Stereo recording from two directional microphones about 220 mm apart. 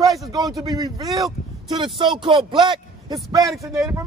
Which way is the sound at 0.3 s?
15° right (ahead or behind).